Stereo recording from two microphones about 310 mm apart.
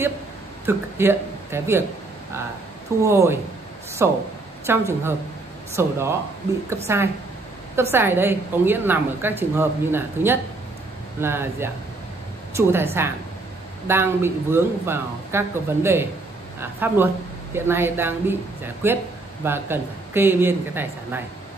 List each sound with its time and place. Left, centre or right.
0.7 s a woman's voice: centre
3.0 s a woman's voice: centre